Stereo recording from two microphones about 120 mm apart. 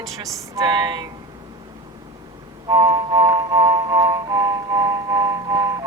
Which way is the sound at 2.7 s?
30° right (ahead or behind).